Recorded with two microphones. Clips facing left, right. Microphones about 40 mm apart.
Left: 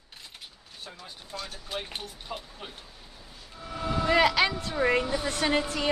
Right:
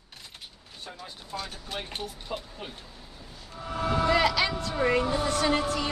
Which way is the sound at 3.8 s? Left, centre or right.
Right.